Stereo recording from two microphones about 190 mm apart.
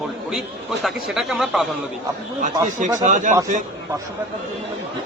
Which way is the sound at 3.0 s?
40° right (ahead or behind).